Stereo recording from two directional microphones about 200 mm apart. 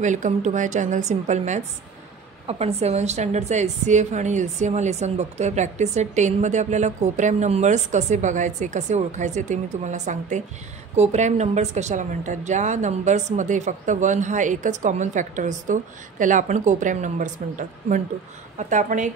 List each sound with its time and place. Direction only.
0.0 s a woman's voice: 40° right (ahead or behind)